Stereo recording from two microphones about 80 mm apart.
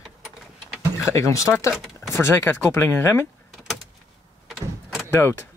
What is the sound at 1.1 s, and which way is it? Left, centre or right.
Speech, left.